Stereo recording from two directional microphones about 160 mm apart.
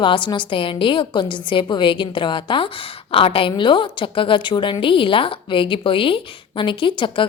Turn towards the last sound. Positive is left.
turn(degrees=30)  # may be behind; listen again after turning